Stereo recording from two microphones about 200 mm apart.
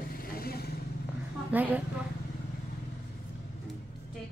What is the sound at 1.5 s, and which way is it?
Speech, 10° right (ahead or behind).